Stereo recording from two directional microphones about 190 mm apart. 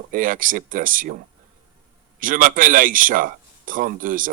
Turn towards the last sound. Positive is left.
turn(degrees=-45)  # may be behind; listen again after turning